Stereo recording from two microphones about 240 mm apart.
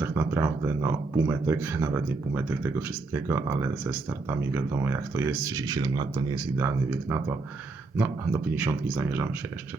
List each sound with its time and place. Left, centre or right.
0.0 s speech: centre
7.9 s speech: centre